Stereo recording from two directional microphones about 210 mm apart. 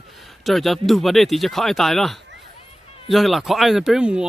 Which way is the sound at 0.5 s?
Centre (ahead or behind).